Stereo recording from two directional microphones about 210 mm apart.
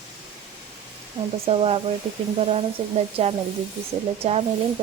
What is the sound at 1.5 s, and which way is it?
Speech, 25° right (ahead or behind).